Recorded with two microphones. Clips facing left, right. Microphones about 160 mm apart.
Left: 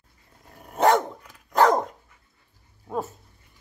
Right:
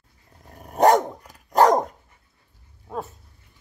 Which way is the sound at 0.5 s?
40° right (ahead or behind).